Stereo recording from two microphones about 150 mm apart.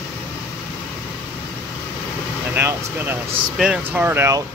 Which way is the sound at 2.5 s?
15° right (ahead or behind).